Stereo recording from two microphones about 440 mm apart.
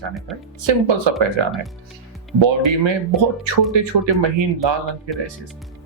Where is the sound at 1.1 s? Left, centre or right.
Right.